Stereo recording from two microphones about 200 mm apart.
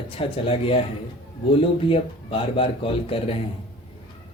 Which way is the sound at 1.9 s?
25° left (ahead or behind).